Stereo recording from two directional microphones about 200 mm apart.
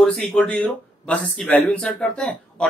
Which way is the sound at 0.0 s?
5° left (ahead or behind).